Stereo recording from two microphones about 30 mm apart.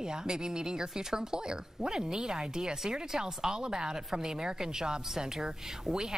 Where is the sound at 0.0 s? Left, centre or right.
Right.